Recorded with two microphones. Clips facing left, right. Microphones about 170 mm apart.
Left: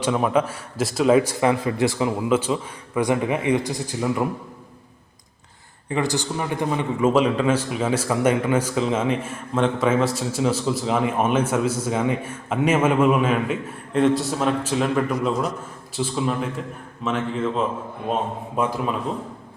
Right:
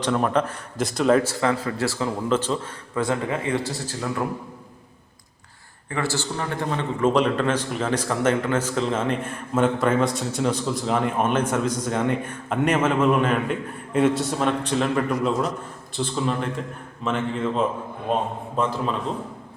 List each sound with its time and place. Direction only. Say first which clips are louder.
0.0 s a man's voice: left 1 dB; 5° left (ahead or behind)
5.9 s a man's voice: left 3 dB; 15° left (ahead or behind)